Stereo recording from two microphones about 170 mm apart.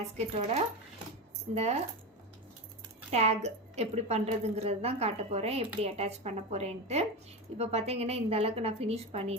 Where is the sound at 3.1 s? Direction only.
40° right (ahead or behind).